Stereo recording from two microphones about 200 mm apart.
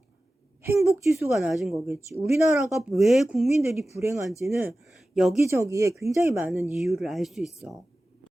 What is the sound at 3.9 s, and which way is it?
Speech, 15° right (ahead or behind).